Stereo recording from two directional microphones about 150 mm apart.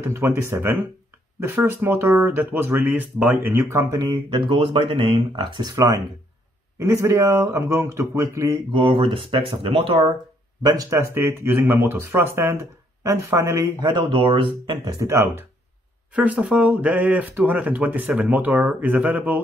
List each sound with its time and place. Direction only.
0.0 s speech: 15° right (ahead or behind)
4.1 s speech: 35° right (ahead or behind); by 8.5 s 20° right (ahead or behind)
8.7 s speech: 35° right (ahead or behind)
10.6 s speech: 25° right (ahead or behind)
15.0 s speech: 15° right (ahead or behind)